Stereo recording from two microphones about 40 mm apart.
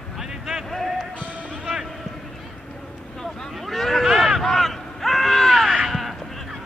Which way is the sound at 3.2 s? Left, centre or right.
Centre.